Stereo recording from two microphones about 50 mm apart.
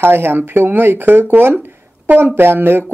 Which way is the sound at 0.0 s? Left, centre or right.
Right.